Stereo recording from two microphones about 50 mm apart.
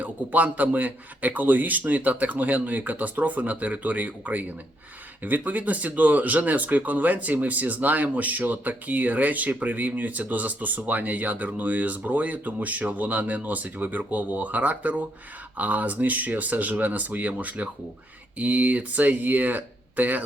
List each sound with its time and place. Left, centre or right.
0.0 s speech: right